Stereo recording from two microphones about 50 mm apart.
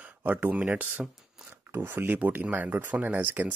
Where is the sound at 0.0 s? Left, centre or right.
Right.